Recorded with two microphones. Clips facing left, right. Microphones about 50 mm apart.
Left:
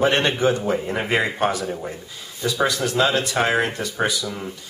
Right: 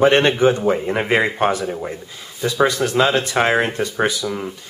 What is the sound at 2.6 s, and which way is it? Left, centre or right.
Speech, right.